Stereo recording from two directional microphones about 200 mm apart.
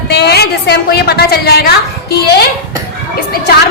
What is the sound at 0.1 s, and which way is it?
A woman's voice, 55° left (ahead or behind).